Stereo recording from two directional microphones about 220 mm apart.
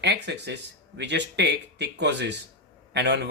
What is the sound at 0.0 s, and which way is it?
Speech, 50° right (ahead or behind).